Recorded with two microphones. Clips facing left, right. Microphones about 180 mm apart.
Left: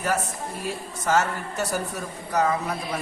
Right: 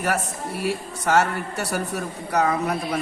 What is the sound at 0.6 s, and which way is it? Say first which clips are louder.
Speech: right 5 dB; 65° right (ahead or behind).